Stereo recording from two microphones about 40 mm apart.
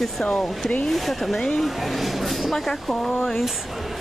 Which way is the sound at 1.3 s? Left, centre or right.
Centre.